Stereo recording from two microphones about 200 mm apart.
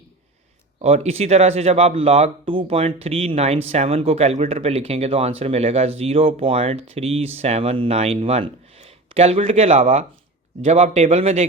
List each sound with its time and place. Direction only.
0.8 s speech: 30° right (ahead or behind)